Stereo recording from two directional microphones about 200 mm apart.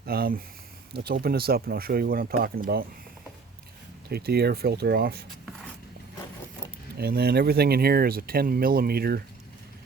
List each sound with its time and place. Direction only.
0.0 s speech: 50° right (ahead or behind)
4.1 s speech: 50° right (ahead or behind)
6.9 s speech: 50° right (ahead or behind)